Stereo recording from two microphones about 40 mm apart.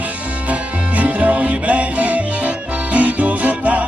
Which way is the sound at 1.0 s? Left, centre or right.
Right.